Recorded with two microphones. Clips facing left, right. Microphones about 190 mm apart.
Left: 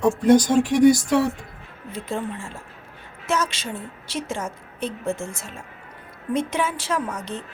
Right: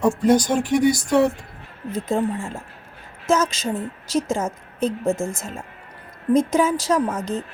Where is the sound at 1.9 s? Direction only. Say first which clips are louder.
Right 6 dB; 40° right (ahead or behind).